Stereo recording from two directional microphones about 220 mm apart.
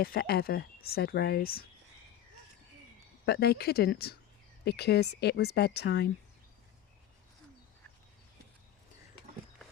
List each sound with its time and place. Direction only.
0.0 s speech: 45° left (ahead or behind)
3.2 s speech: 45° left (ahead or behind)